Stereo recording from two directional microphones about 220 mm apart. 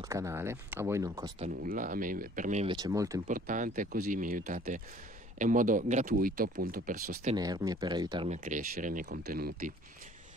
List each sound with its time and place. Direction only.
0.1 s speech: 10° right (ahead or behind)
1.6 s speech: 40° right (ahead or behind)
2.7 s speech: 15° right (ahead or behind)
3.3 s speech: 35° right (ahead or behind)
7.3 s speech: 15° right (ahead or behind)
8.5 s speech: 35° right (ahead or behind)